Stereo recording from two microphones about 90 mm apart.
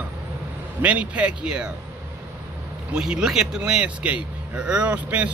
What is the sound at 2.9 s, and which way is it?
A man's voice, 10° right (ahead or behind).